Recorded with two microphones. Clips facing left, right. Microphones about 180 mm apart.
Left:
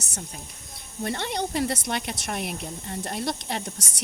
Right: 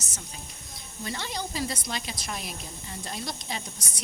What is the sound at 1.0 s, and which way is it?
Speech, 60° left (ahead or behind).